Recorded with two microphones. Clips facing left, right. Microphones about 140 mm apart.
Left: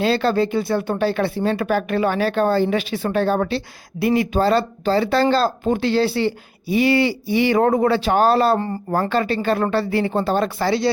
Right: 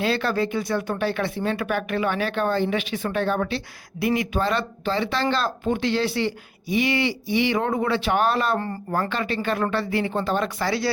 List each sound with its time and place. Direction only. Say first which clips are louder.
0.0 s speech: left 5 dB; 30° left (ahead or behind)